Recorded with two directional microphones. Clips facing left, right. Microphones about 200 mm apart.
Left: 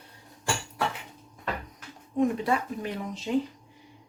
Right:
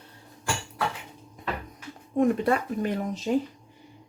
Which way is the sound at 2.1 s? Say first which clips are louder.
Right 3 dB; 50° right (ahead or behind).